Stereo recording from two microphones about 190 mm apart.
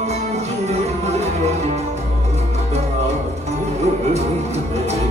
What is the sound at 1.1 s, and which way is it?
Music, 35° right (ahead or behind).